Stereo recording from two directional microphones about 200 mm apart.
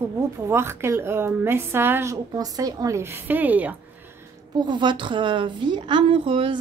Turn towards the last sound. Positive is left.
turn(degrees=-25)  # may be behind; listen again after turning